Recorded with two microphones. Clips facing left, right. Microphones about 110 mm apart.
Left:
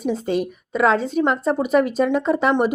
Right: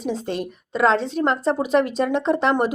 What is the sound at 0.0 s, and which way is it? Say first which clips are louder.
A woman's voice: left 4 dB; 5° left (ahead or behind).